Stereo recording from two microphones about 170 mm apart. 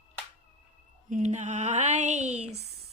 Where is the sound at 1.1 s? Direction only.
45° right (ahead or behind).